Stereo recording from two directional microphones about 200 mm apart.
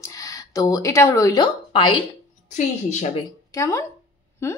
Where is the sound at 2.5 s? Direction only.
35° left (ahead or behind).